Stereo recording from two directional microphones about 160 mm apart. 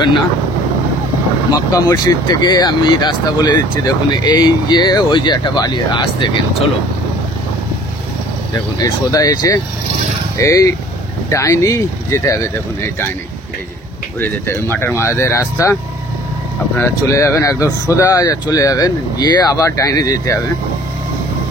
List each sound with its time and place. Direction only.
1.5 s speech: 25° left (ahead or behind)
8.7 s speech: 25° left (ahead or behind)
14.2 s speech: 15° left (ahead or behind)
16.7 s speech: 15° left (ahead or behind)